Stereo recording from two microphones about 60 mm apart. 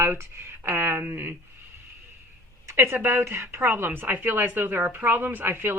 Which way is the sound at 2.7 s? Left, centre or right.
Right.